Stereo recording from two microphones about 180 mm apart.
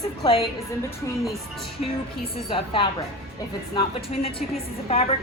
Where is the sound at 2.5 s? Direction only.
30° left (ahead or behind).